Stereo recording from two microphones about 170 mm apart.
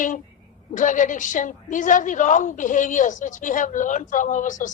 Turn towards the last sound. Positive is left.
turn(degrees=50)  # may be behind; listen again after turning